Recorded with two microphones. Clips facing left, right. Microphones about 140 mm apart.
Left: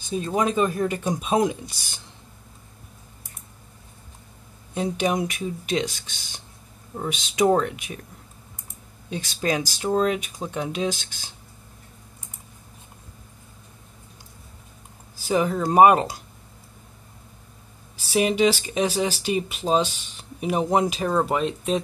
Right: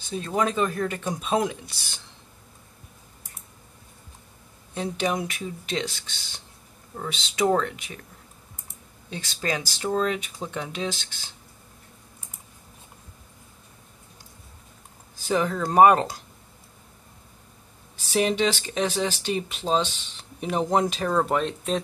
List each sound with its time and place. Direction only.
0.1 s speech: 15° left (ahead or behind)
4.7 s speech: 15° left (ahead or behind)
9.1 s speech: 15° left (ahead or behind)
15.1 s speech: 10° left (ahead or behind)
18.1 s speech: 10° left (ahead or behind)